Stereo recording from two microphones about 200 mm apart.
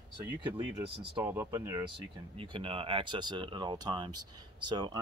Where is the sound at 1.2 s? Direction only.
15° right (ahead or behind).